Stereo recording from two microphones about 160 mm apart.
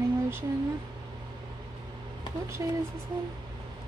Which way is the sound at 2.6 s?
20° right (ahead or behind).